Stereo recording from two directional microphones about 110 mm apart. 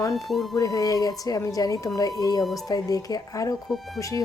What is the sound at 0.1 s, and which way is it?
Speech, centre (ahead or behind).